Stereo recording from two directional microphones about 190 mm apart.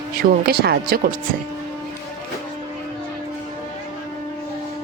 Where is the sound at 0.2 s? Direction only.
55° right (ahead or behind).